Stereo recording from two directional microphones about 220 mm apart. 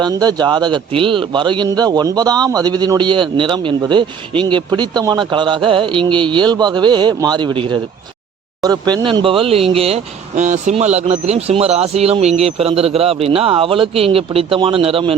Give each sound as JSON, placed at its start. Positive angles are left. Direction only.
{"t": 0.0, "sound": "a man's voice", "side_deg": -20}